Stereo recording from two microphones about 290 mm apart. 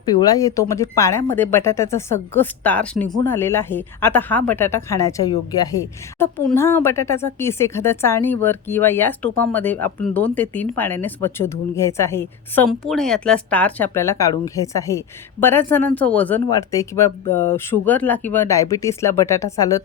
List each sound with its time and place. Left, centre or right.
0.0 s speech: centre